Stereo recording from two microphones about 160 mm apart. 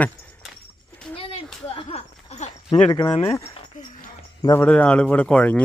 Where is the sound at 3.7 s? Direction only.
55° left (ahead or behind).